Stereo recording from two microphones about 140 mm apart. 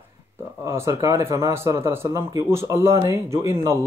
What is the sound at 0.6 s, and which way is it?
Speech, 20° right (ahead or behind).